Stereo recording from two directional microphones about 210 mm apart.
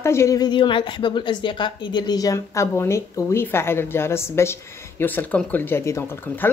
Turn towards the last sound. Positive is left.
turn(degrees=10)  # may be behind; listen again after turning